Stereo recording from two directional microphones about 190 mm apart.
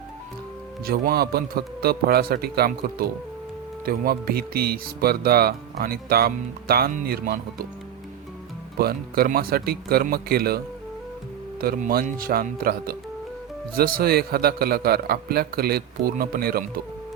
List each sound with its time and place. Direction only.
0.9 s speech: 55° right (ahead or behind)
8.8 s speech: 55° right (ahead or behind)
11.6 s speech: 50° right (ahead or behind)